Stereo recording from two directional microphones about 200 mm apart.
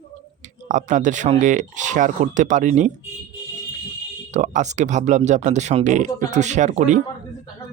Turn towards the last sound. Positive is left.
turn(degrees=-35)  # may be behind; listen again after turning